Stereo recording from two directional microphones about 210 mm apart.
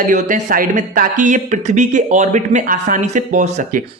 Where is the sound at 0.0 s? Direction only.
40° right (ahead or behind).